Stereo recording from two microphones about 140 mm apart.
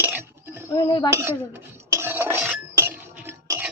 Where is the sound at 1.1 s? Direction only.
20° right (ahead or behind).